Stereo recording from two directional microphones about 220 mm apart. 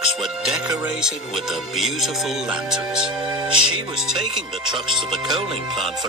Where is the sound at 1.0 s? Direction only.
Centre (ahead or behind).